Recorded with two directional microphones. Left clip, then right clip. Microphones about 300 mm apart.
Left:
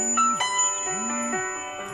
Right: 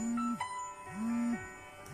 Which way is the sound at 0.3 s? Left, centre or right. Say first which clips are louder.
Left 15 dB; left.